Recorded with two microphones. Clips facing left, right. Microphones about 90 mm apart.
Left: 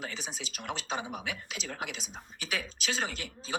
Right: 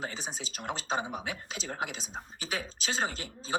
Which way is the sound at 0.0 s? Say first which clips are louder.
Right 2 dB; 35° right (ahead or behind).